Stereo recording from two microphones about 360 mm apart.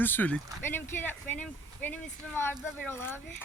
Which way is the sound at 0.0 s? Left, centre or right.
Centre.